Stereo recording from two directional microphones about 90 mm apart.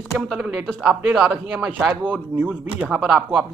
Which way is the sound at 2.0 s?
20° right (ahead or behind).